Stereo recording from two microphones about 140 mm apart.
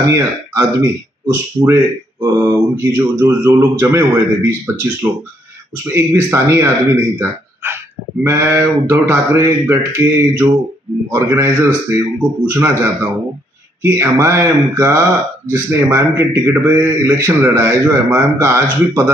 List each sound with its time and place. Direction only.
0.0 s a man's voice: 20° right (ahead or behind)
5.9 s a man's voice: 15° right (ahead or behind)